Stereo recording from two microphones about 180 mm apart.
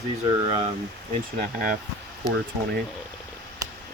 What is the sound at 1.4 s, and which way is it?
Speech, 55° right (ahead or behind).